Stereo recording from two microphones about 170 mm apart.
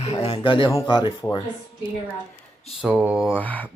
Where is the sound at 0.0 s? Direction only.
40° left (ahead or behind).